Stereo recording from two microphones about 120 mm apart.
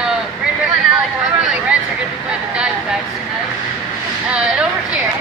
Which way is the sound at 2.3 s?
10° right (ahead or behind).